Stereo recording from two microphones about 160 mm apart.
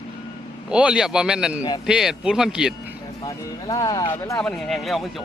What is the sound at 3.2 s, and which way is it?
Speech, 20° left (ahead or behind).